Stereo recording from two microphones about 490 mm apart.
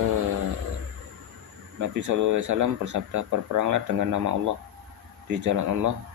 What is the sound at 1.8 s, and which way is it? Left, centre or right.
Speech, right.